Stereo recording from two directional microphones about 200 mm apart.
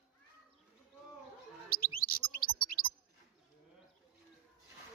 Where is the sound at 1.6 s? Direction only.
45° left (ahead or behind).